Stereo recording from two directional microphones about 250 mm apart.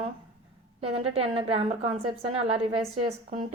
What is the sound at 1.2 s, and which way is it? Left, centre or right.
A woman's voice, right.